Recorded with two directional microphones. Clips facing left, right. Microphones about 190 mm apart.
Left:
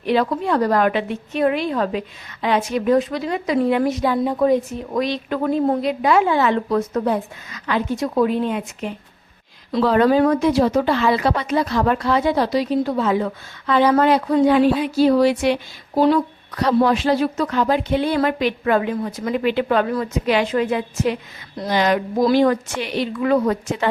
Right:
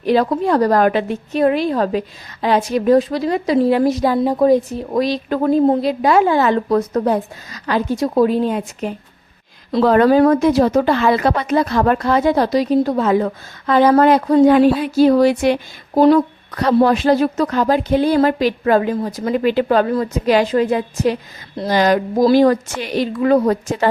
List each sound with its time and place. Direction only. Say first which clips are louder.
0.0 s a woman's voice: right 4 dB; 40° right (ahead or behind)
9.8 s a woman's voice: right 4 dB; 50° right (ahead or behind)